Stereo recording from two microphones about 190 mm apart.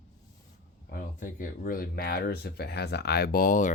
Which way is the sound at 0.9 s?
45° left (ahead or behind).